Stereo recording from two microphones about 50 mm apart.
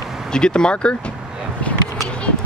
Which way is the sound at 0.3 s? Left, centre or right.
Centre.